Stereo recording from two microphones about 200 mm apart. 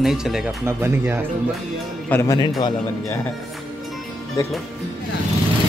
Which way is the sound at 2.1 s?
15° left (ahead or behind).